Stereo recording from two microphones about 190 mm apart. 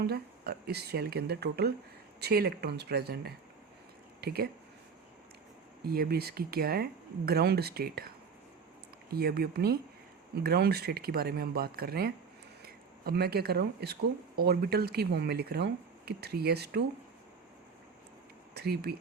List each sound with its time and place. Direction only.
0.1 s speech: 55° right (ahead or behind)
5.8 s speech: 55° right (ahead or behind)
18.5 s speech: 55° right (ahead or behind)